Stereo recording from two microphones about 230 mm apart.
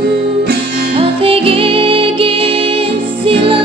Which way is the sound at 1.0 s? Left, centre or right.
Right.